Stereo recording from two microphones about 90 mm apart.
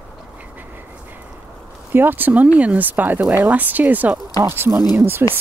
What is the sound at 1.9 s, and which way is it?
Speech, 20° right (ahead or behind).